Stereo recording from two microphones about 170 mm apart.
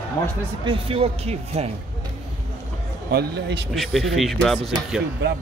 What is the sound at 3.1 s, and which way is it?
Speech, 85° right.